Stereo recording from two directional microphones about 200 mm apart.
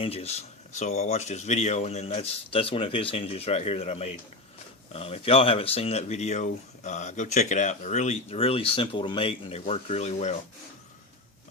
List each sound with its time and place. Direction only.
0.0 s speech: 30° left (ahead or behind)